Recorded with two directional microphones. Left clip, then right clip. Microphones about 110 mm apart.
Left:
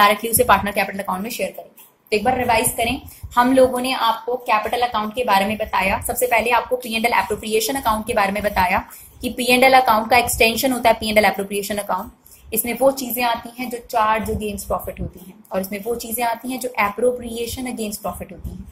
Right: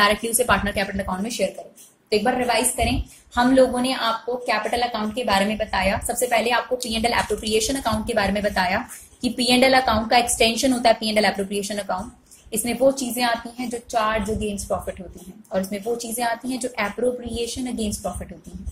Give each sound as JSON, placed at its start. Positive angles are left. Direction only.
{"t": 0.0, "sound": "a woman's voice", "side_deg": -5}
{"t": 2.0, "sound": "a woman's voice", "side_deg": -30}
{"t": 3.3, "sound": "a woman's voice", "side_deg": 0}
{"t": 15.5, "sound": "a woman's voice", "side_deg": -15}